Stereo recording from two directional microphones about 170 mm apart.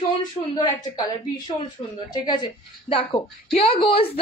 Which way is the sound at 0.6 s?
25° left (ahead or behind).